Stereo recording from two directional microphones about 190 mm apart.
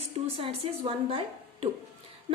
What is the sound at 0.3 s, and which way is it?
Speech, 30° right (ahead or behind).